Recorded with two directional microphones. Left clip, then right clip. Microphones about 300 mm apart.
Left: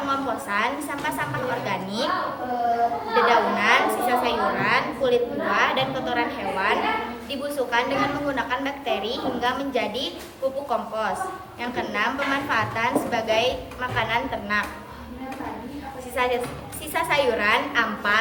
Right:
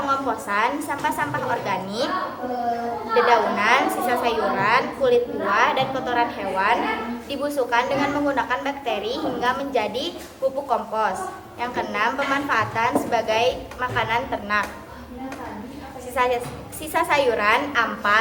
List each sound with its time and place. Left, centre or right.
0.1 s a woman's voice: centre
3.2 s a woman's voice: centre
16.1 s a woman's voice: centre